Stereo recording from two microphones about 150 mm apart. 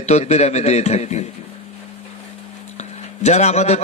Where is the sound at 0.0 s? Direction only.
45° left (ahead or behind).